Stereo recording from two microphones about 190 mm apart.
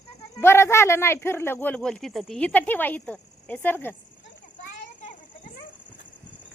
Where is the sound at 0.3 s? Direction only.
15° left (ahead or behind).